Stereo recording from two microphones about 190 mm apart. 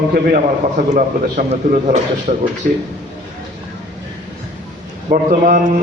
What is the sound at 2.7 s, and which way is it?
Speech, 50° right (ahead or behind).